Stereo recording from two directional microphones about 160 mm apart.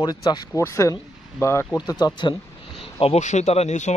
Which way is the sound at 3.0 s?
45° left (ahead or behind).